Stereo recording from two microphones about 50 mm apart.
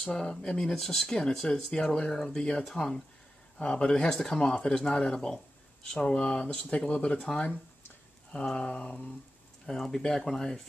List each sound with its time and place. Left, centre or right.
0.0 s speech: centre
0.7 s speech: centre
3.5 s speech: left
8.5 s speech: centre